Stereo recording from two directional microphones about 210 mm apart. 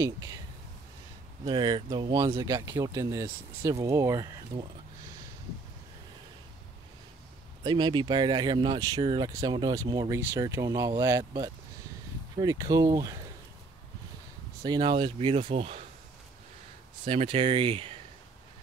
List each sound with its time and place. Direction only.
0.0 s speech: 15° right (ahead or behind)
1.4 s speech: 20° right (ahead or behind)
7.6 s speech: 20° right (ahead or behind)
14.6 s speech: 20° right (ahead or behind)
17.0 s speech: 25° right (ahead or behind)